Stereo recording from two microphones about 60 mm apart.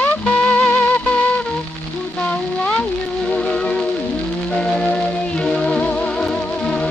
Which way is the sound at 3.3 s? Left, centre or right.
Centre.